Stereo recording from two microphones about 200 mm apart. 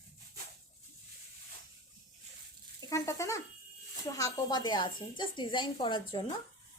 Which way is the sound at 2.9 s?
15° left (ahead or behind).